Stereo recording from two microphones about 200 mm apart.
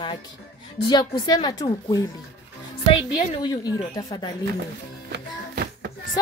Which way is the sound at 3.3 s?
20° left (ahead or behind).